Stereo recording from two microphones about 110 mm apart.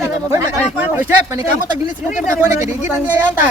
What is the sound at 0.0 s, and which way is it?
Speech, 25° right (ahead or behind).